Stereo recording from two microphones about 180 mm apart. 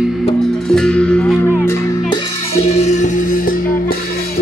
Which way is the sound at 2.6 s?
40° left (ahead or behind).